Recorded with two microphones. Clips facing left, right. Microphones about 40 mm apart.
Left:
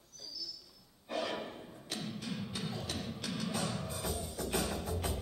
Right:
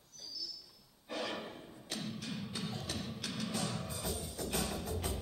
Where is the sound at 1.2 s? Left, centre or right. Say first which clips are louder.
Left 1 dB; centre.